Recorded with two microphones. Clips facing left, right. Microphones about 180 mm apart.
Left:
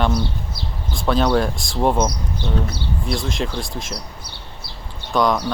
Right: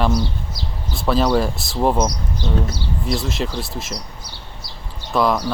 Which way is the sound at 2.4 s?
55° left (ahead or behind).